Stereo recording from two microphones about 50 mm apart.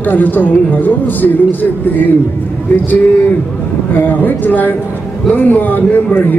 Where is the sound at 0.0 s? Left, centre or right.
Left.